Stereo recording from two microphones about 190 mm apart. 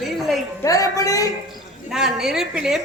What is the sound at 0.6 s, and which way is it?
Speech, 20° left (ahead or behind).